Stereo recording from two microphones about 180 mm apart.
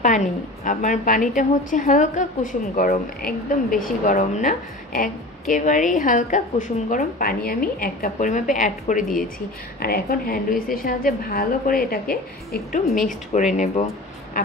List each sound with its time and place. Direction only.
0.0 s a woman's voice: 45° left (ahead or behind)
9.8 s a woman's voice: 55° left (ahead or behind)
13.3 s speech: 40° left (ahead or behind)